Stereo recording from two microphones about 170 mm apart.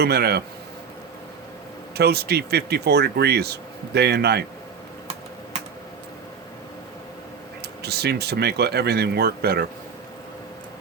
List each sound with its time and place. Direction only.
0.0 s speech: 70° right (ahead or behind)
2.0 s speech: 70° right (ahead or behind)
7.8 s speech: 70° right (ahead or behind)